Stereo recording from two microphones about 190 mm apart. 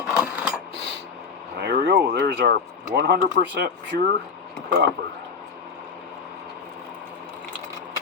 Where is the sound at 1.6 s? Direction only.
65° right (ahead or behind).